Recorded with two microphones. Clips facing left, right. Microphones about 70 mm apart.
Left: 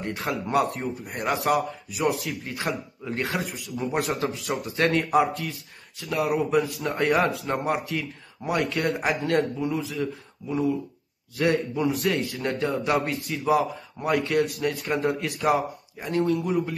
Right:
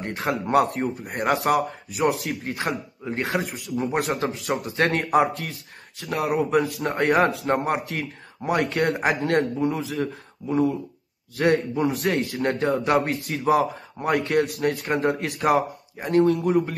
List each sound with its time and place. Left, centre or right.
0.0 s speech: right
11.3 s speech: right